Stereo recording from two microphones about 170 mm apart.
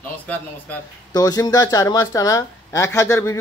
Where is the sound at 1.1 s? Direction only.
25° left (ahead or behind).